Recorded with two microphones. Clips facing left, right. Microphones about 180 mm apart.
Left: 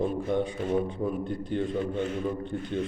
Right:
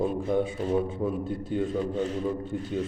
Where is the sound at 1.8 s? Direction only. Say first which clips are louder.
Right 1 dB; 35° right (ahead or behind).